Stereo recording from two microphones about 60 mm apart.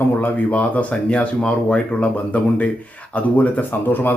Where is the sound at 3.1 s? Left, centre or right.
Left.